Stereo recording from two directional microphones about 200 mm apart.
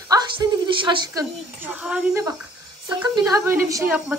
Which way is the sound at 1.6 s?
5° right (ahead or behind).